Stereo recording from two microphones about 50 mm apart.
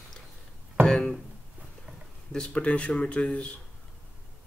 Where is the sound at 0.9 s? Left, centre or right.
Centre.